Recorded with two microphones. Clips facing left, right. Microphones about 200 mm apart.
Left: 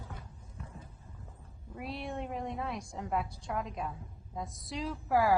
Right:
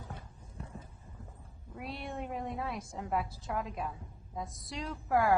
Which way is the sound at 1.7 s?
Centre (ahead or behind).